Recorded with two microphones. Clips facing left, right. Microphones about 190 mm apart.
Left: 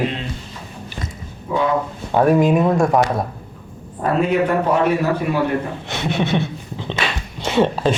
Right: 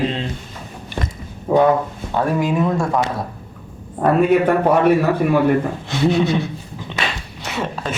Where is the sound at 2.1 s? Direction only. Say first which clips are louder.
Left 5 dB; 20° left (ahead or behind).